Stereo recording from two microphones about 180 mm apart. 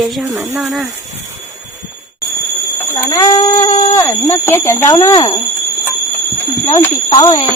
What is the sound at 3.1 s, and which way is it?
Speech, 20° left (ahead or behind).